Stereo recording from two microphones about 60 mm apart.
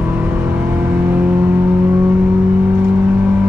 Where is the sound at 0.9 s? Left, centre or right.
Right.